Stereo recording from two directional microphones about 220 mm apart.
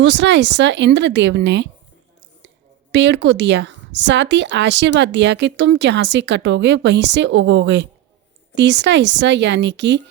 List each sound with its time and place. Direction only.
0.0 s a woman's voice: 55° right (ahead or behind)
2.9 s a woman's voice: 55° right (ahead or behind)